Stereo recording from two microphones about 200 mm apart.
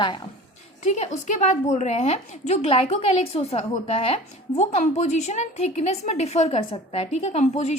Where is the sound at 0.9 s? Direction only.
35° left (ahead or behind).